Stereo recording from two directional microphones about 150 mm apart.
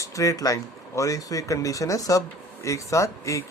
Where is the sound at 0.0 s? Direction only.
20° left (ahead or behind).